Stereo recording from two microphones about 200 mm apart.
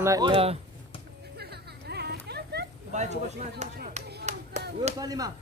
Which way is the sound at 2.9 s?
35° right (ahead or behind).